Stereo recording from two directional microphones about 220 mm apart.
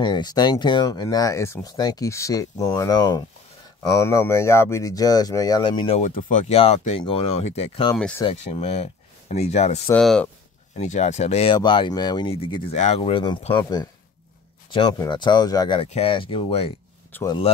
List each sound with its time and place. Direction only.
0.0 s speech: 20° left (ahead or behind)
7.9 s speech: 10° left (ahead or behind)
8.3 s speech: 30° left (ahead or behind)
9.8 s speech: 5° left (ahead or behind)
10.8 s speech: 30° left (ahead or behind)
17.1 s speech: 15° left (ahead or behind)